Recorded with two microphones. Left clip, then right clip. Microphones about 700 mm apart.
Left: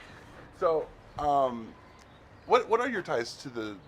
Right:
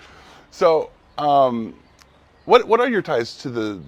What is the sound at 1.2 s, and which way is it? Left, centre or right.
Speech, right.